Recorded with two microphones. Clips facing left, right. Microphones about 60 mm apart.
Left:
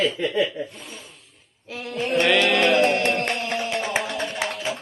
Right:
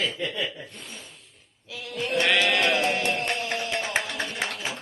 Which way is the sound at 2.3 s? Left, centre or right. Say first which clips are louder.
Left 6 dB; left.